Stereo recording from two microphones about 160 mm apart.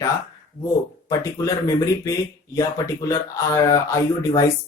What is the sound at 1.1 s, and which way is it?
Speech, 20° left (ahead or behind).